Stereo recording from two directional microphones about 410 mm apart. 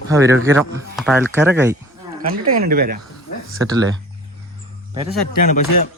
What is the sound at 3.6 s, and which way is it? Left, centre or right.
Speech, centre.